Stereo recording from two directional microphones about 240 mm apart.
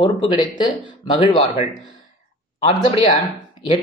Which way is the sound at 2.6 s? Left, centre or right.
Left.